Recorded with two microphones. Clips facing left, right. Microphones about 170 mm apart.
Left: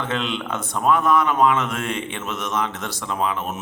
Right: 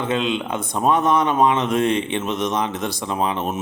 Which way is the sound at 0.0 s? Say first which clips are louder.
Right 4 dB; 15° right (ahead or behind).